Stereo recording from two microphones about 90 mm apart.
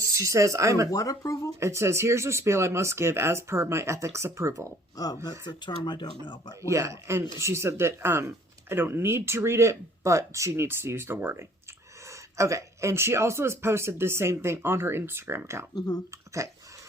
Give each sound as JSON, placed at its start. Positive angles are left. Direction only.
{"t": 0.0, "sound": "speech", "side_deg": -35}
{"t": 0.9, "sound": "speech", "side_deg": 40}
{"t": 1.5, "sound": "speech", "side_deg": -30}
{"t": 4.9, "sound": "speech", "side_deg": 45}
{"t": 6.6, "sound": "speech", "side_deg": -30}
{"t": 12.0, "sound": "speech", "side_deg": -35}